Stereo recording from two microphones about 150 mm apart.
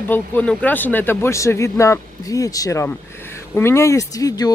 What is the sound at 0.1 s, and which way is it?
Speech, 10° left (ahead or behind).